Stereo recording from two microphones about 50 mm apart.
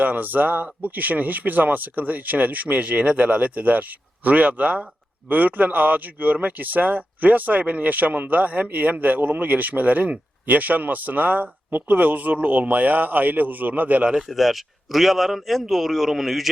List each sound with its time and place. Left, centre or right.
0.0 s speech: right
14.3 s a man's voice: centre